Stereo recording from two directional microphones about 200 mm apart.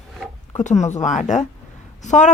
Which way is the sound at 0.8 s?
35° left (ahead or behind).